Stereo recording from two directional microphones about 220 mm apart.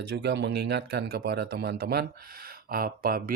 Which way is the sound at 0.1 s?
50° right (ahead or behind).